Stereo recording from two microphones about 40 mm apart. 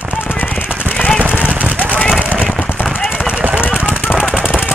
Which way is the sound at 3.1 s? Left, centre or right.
Right.